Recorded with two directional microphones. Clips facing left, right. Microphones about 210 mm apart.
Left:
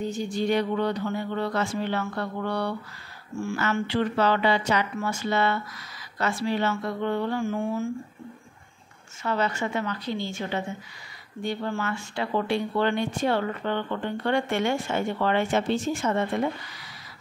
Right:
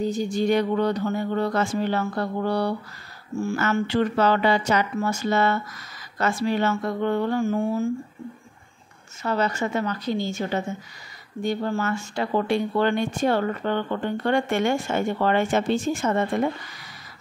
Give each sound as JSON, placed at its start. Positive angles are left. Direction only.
{"t": 0.0, "sound": "speech", "side_deg": -40}
{"t": 9.2, "sound": "a woman's voice", "side_deg": -40}